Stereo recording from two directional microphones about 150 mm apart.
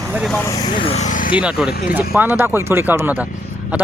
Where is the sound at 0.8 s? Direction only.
40° left (ahead or behind).